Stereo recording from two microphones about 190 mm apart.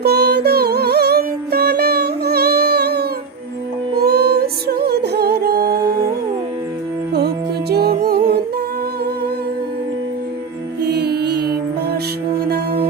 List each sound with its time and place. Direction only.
0.0 s music: 55° right (ahead or behind)
7.1 s music: 60° right (ahead or behind)
10.8 s music: 60° right (ahead or behind)